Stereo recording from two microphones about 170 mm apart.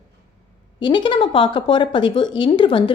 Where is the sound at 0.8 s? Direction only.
30° left (ahead or behind).